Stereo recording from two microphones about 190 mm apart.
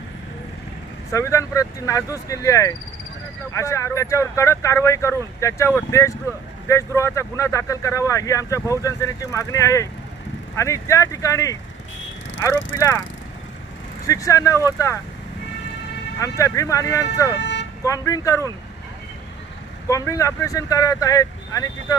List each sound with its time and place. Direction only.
1.1 s speech: 15° left (ahead or behind)
14.1 s speech: 15° left (ahead or behind)
16.2 s speech: 15° left (ahead or behind)
17.3 s vehicle: 65° left (ahead or behind)
17.8 s speech: 15° left (ahead or behind)
19.9 s speech: 15° left (ahead or behind)